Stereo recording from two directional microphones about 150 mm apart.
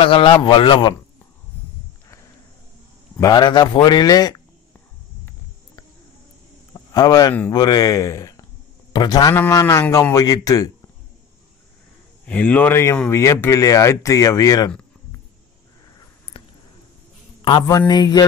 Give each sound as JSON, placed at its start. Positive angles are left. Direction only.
{"t": 0.0, "sound": "speech", "side_deg": 35}
{"t": 3.2, "sound": "speech", "side_deg": 30}
{"t": 6.7, "sound": "a sound", "side_deg": 25}
{"t": 7.5, "sound": "speech", "side_deg": 25}
{"t": 12.3, "sound": "speech", "side_deg": 10}
{"t": 16.3, "sound": "a sound", "side_deg": 35}
{"t": 17.4, "sound": "speech", "side_deg": 30}